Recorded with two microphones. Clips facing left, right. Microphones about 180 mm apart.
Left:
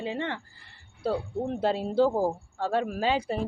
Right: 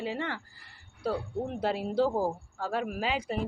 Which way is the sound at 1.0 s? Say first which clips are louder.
Left 3 dB; 30° left (ahead or behind).